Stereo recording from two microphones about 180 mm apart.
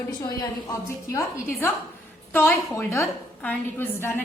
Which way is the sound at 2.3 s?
10° left (ahead or behind).